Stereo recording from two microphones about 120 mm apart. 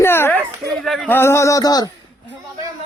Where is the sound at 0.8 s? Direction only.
Centre (ahead or behind).